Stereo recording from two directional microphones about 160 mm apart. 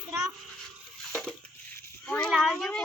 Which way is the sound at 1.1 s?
Centre (ahead or behind).